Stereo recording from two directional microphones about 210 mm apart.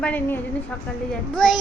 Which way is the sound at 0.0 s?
10° left (ahead or behind).